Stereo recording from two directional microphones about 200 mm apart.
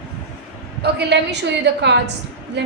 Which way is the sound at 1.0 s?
55° right (ahead or behind).